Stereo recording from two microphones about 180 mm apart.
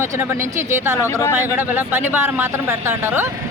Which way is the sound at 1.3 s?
10° right (ahead or behind).